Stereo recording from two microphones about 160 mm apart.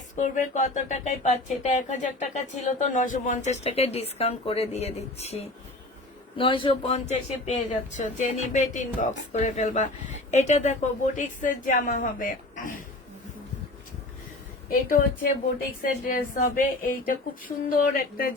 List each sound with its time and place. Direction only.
0.2 s speech: 55° left (ahead or behind)
14.7 s a woman's voice: 60° left (ahead or behind)